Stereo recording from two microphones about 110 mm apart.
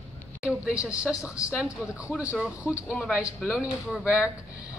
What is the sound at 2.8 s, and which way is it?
Speech, 5° left (ahead or behind).